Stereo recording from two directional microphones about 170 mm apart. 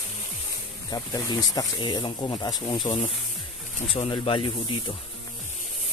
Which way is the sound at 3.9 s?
35° left (ahead or behind).